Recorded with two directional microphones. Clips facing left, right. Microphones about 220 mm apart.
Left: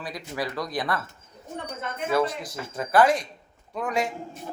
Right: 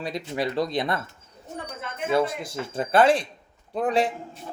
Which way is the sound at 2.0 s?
25° right (ahead or behind).